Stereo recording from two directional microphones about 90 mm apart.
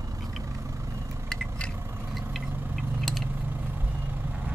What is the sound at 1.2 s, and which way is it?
Vehicle, 10° left (ahead or behind).